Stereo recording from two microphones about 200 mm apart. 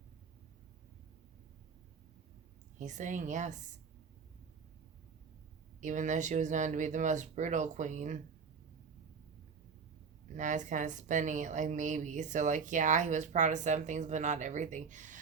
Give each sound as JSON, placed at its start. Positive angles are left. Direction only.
{"t": 2.7, "sound": "speech", "side_deg": -40}
{"t": 5.8, "sound": "speech", "side_deg": -40}
{"t": 10.3, "sound": "speech", "side_deg": -40}